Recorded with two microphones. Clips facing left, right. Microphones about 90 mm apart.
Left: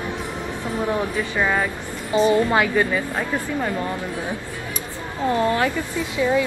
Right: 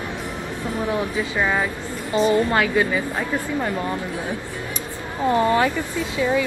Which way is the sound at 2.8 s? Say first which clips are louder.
Even; centre (ahead or behind).